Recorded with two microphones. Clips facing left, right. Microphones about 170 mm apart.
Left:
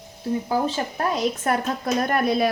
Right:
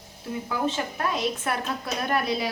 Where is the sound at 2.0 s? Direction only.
50° left (ahead or behind).